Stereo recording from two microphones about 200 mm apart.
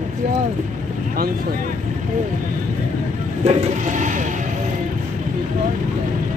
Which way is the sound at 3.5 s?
35° right (ahead or behind).